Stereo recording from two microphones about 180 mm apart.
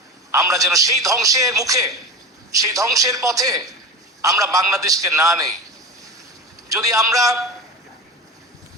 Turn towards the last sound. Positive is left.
turn(degrees=-20)  # may be behind; listen again after turning